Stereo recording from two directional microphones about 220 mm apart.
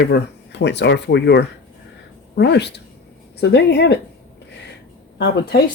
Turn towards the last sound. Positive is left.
turn(degrees=50)  # may be behind; listen again after turning